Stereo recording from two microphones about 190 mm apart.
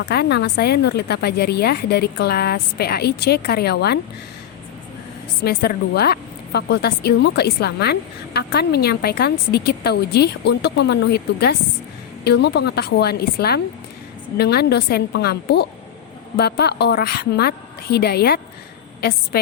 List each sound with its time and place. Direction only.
0.0 s a woman's voice: 60° left (ahead or behind)
5.4 s a woman's voice: 55° left (ahead or behind)